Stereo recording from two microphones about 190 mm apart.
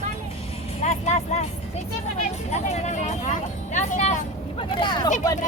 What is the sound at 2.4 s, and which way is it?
Speech, 35° left (ahead or behind).